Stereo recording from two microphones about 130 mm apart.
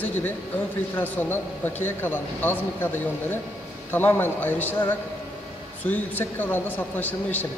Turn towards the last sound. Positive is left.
turn(degrees=15)  # may be behind; listen again after turning